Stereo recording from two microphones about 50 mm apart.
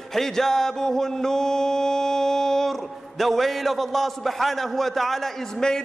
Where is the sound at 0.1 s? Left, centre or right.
Centre.